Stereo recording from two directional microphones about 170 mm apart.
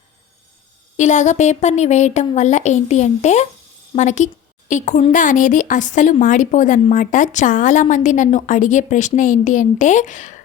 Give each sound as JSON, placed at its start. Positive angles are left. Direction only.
{"t": 0.9, "sound": "speech", "side_deg": 45}